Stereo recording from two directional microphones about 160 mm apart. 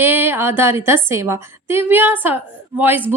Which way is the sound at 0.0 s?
15° right (ahead or behind).